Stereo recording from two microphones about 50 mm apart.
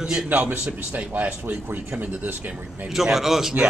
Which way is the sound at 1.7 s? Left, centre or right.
Right.